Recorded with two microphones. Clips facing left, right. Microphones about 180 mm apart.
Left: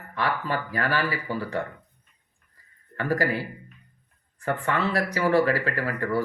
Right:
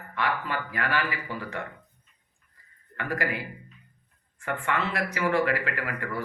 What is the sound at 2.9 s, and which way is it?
A man's voice, 35° left (ahead or behind).